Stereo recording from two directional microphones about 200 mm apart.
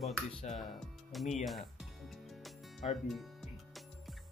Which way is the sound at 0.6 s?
Centre (ahead or behind).